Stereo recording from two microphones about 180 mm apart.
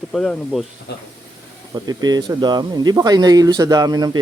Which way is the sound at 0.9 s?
65° left (ahead or behind).